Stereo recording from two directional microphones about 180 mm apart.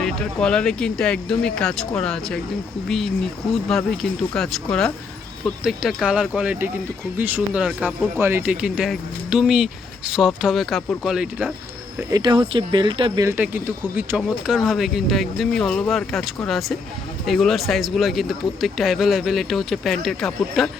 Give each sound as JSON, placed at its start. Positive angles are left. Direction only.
{"t": 0.0, "sound": "speech", "side_deg": 5}
{"t": 3.5, "sound": "speech", "side_deg": 0}
{"t": 11.9, "sound": "speech", "side_deg": -20}
{"t": 13.2, "sound": "speech", "side_deg": -10}